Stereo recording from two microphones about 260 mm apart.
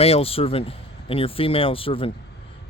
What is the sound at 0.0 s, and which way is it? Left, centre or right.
Speech, left.